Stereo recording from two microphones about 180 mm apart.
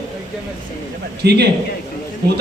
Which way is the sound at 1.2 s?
65° right (ahead or behind).